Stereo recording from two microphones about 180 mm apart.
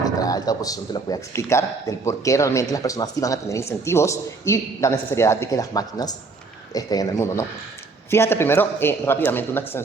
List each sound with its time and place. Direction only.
0.0 s a man's voice: 20° left (ahead or behind)